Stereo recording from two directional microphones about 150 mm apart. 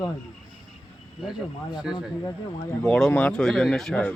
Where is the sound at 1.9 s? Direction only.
5° right (ahead or behind).